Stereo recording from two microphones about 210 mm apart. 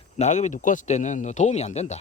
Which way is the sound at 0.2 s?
35° left (ahead or behind).